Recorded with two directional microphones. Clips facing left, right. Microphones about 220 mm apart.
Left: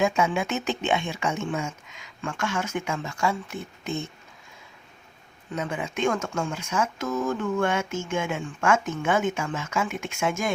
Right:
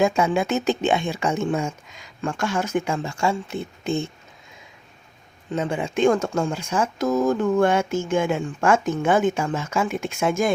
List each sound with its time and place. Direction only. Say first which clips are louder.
0.0 s speech: right 4 dB; 35° right (ahead or behind)
5.5 s speech: right 5 dB; 30° right (ahead or behind)